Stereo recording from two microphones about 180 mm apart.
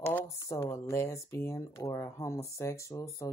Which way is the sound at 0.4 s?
15° left (ahead or behind).